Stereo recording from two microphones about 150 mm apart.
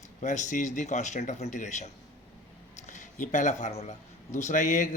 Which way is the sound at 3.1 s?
55° left (ahead or behind).